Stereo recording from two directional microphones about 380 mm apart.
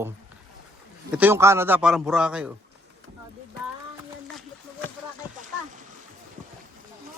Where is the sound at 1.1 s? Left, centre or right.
Centre.